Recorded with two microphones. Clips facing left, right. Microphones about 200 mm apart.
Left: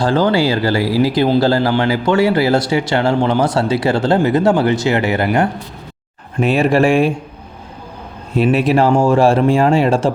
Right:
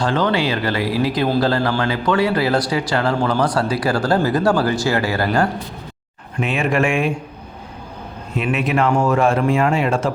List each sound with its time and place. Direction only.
0.0 s speech: 30° left (ahead or behind)
6.4 s speech: 35° left (ahead or behind)
8.4 s speech: 35° left (ahead or behind)